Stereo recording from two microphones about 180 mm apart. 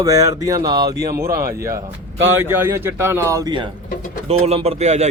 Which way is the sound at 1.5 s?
15° right (ahead or behind).